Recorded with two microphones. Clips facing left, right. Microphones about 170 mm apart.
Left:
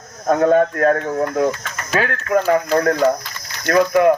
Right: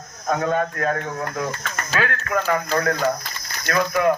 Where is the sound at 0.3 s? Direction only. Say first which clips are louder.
Left 8 dB; 45° left (ahead or behind).